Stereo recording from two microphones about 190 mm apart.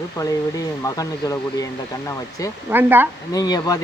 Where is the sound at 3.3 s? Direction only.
20° left (ahead or behind).